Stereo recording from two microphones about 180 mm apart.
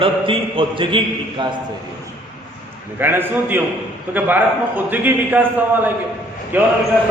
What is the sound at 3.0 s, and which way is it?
A man's voice, 10° right (ahead or behind).